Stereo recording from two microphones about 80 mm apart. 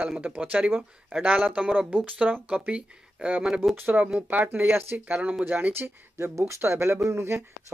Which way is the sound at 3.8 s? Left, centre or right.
Right.